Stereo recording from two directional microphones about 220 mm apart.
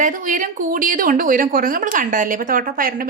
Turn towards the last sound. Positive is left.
turn(degrees=-40)  # may be behind; listen again after turning